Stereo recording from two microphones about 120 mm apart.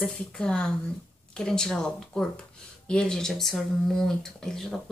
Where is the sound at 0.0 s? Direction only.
10° left (ahead or behind).